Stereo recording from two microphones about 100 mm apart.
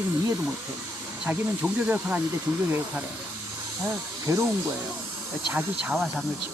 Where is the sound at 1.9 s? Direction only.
15° right (ahead or behind).